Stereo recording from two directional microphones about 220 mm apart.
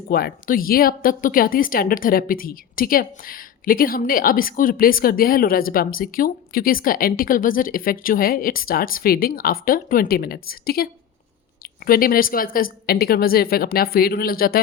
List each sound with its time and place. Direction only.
0.1 s speech: 45° left (ahead or behind)
11.9 s a woman's voice: 40° left (ahead or behind)